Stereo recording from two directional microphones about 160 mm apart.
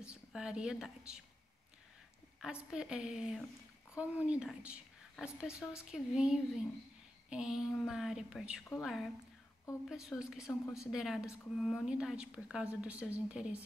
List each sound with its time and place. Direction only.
0.0 s a woman's voice: 5° right (ahead or behind)
2.4 s a woman's voice: 5° right (ahead or behind)
10.6 s speech: 20° left (ahead or behind)
10.9 s a woman's voice: 5° right (ahead or behind)